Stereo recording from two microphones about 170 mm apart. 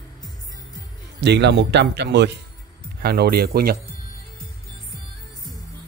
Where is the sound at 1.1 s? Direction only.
90° right.